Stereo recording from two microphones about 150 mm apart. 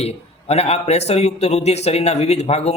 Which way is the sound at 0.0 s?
45° left (ahead or behind).